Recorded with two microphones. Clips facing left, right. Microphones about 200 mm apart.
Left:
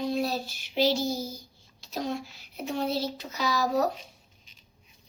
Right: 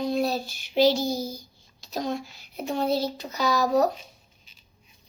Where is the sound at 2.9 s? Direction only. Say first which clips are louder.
Right 4 dB; 5° left (ahead or behind).